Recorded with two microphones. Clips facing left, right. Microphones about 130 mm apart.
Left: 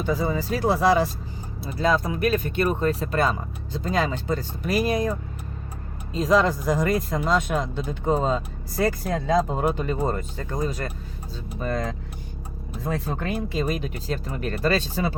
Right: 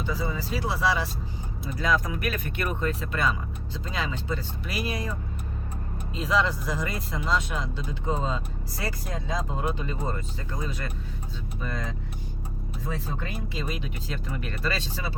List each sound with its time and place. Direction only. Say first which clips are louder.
0.0 s speech: left 6 dB; 50° left (ahead or behind)
1.6 s speech: left 4 dB; 30° left (ahead or behind)
6.1 s speech: left 6 dB; 45° left (ahead or behind)
12.8 s speech: left 6 dB; 60° left (ahead or behind)